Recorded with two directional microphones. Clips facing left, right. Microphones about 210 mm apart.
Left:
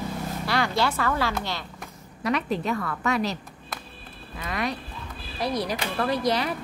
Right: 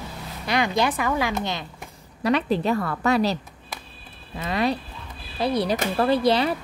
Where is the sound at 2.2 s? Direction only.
30° right (ahead or behind).